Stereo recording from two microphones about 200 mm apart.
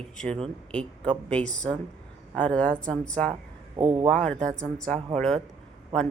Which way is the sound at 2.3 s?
5° left (ahead or behind).